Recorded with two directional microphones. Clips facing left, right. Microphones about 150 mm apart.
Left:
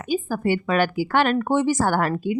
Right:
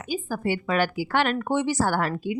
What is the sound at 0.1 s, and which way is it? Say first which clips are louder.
A woman's voice: left 5 dB; 50° left (ahead or behind).